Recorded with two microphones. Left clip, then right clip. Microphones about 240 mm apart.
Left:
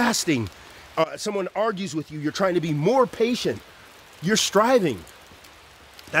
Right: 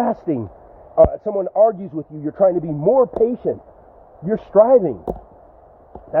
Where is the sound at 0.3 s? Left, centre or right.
Left.